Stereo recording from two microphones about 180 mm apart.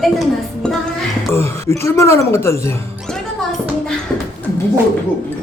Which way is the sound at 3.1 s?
5° left (ahead or behind).